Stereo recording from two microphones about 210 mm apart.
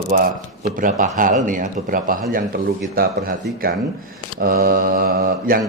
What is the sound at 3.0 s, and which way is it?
Mantra, 45° right (ahead or behind).